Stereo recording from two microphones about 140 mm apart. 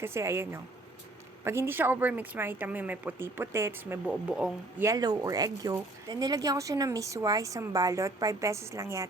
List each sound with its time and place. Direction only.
0.0 s speech: 20° right (ahead or behind)
4.8 s speech: 25° right (ahead or behind)